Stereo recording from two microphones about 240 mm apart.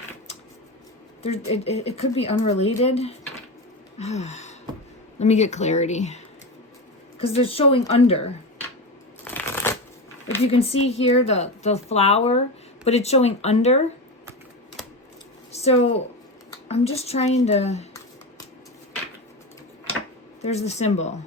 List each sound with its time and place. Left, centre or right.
1.2 s a woman's voice: left
3.9 s gasp: left
5.2 s a woman's voice: left
9.2 s shuffling cards: centre
10.4 s a woman's voice: left
15.5 s a woman's voice: left
20.4 s a woman's voice: left